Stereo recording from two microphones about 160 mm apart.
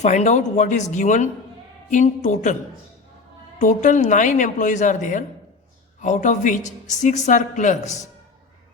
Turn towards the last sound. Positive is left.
turn(degrees=45)  # may be behind; listen again after turning